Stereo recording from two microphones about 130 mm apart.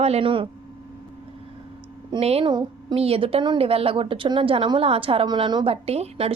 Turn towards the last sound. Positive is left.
turn(degrees=-50)  # may be behind; listen again after turning